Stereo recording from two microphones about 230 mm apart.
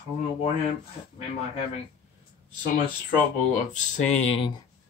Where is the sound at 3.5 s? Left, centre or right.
Left.